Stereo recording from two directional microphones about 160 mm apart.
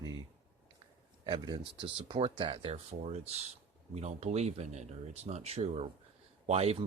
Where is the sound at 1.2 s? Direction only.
30° right (ahead or behind).